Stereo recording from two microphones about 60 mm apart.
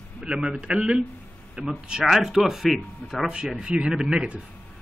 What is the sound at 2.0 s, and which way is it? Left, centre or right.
Speech, centre.